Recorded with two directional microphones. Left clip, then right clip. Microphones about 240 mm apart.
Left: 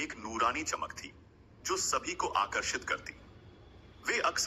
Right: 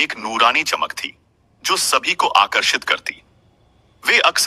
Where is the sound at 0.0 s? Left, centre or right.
Right.